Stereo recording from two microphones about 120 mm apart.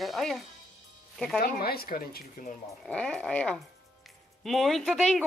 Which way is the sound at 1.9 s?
90° left.